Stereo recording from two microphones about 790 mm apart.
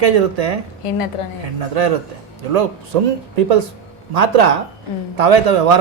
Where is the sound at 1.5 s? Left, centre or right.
Right.